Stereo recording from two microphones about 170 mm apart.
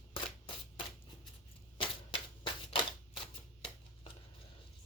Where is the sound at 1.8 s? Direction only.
30° left (ahead or behind).